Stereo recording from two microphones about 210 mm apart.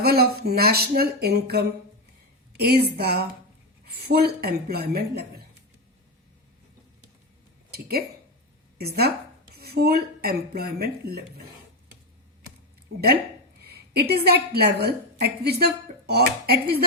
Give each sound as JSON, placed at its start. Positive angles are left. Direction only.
{"t": 0.0, "sound": "speech", "side_deg": -45}
{"t": 2.6, "sound": "speech", "side_deg": -50}
{"t": 7.7, "sound": "speech", "side_deg": -50}
{"t": 13.6, "sound": "a woman's voice", "side_deg": -50}